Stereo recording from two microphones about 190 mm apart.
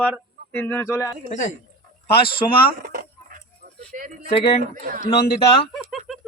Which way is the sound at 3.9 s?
45° right (ahead or behind).